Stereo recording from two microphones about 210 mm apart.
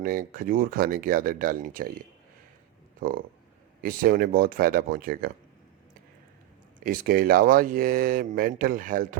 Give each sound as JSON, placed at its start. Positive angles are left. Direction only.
{"t": 0.0, "sound": "speech", "side_deg": -40}
{"t": 3.0, "sound": "speech", "side_deg": -40}
{"t": 6.7, "sound": "speech", "side_deg": -40}